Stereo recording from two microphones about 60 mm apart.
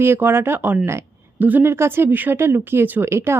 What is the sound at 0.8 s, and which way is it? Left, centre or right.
Speech, right.